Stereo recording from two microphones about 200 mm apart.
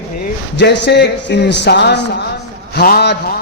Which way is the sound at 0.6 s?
60° left (ahead or behind).